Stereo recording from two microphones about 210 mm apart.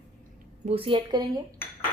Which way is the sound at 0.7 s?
25° right (ahead or behind).